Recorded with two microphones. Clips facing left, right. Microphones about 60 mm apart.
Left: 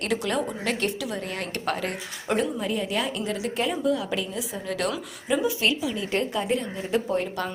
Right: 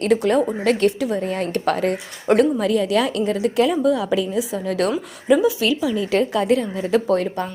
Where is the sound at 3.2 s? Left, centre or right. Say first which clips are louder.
Right 8 dB; right.